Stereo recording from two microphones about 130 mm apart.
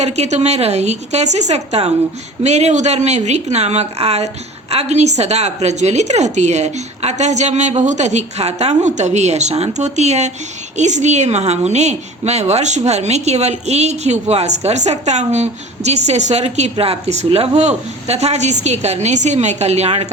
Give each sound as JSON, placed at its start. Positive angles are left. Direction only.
{"t": 0.0, "sound": "a woman's voice", "side_deg": -55}